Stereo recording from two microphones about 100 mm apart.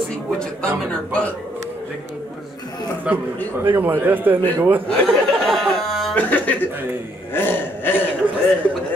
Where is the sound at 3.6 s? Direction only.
20° right (ahead or behind).